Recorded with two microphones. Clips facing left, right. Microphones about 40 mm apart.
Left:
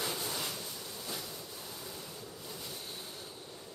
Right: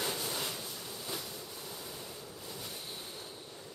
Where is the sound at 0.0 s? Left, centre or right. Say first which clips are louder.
Right 1 dB; centre.